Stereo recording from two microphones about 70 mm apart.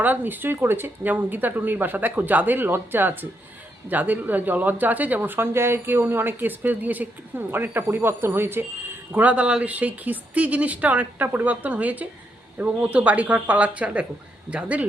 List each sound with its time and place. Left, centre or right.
0.0 s speech: right
9.1 s speech: centre